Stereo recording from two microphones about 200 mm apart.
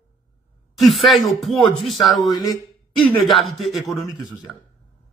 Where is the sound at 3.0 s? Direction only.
5° left (ahead or behind).